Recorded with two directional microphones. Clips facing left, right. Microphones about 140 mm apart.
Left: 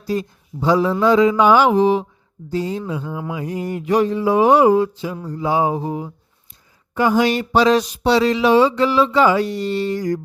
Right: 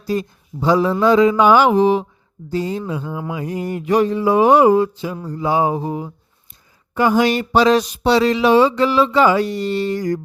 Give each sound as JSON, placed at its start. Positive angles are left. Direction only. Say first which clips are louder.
{"t": 0.1, "sound": "speech", "louder": "right 1 dB", "side_deg": -55}
{"t": 6.9, "sound": "speech", "louder": "right 1 dB", "side_deg": -60}